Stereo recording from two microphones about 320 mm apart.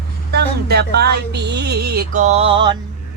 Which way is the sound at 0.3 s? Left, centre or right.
Right.